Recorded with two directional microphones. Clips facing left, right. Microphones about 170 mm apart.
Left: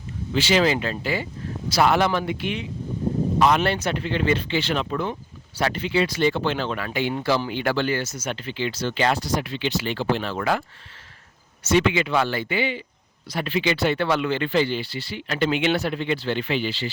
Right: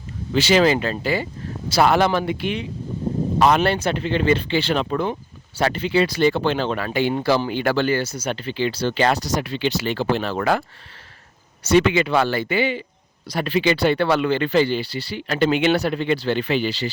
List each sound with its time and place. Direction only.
0.3 s speech: 40° right (ahead or behind)
11.6 s speech: 40° right (ahead or behind)